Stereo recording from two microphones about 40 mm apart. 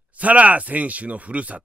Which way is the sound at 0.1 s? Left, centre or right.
Right.